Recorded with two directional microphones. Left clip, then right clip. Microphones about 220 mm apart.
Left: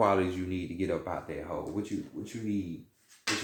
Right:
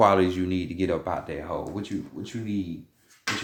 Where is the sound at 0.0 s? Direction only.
40° right (ahead or behind).